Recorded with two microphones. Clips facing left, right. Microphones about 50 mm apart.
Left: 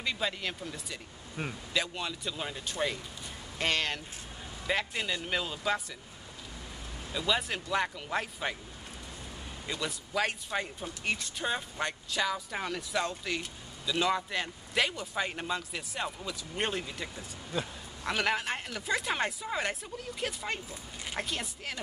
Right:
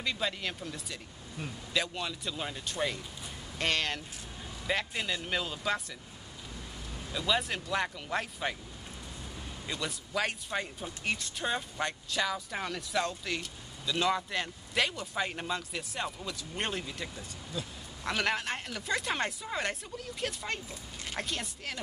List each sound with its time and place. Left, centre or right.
0.0 s speech: centre
1.4 s speech: left
1.7 s speech: centre
7.1 s speech: centre
9.7 s speech: centre
17.5 s speech: left
18.0 s speech: centre